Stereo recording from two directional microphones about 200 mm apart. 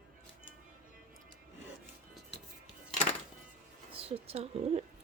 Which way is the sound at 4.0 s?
30° right (ahead or behind).